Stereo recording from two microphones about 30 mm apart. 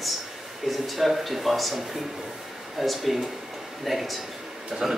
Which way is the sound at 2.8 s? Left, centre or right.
Centre.